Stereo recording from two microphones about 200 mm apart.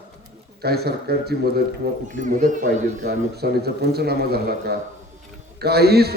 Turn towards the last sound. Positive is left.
turn(degrees=-55)  # may be behind; listen again after turning